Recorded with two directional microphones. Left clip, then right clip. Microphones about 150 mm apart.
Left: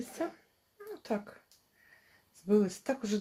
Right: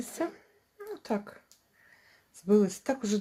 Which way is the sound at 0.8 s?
25° right (ahead or behind).